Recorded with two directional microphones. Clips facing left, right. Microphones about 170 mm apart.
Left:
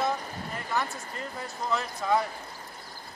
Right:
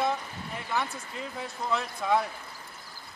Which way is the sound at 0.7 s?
Centre (ahead or behind).